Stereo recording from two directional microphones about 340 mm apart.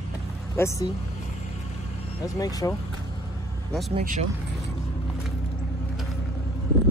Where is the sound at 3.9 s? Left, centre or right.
Right.